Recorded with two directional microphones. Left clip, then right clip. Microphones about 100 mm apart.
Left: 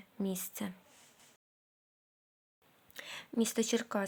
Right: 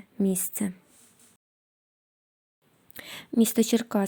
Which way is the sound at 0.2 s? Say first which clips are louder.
Right 10 dB; 45° right (ahead or behind).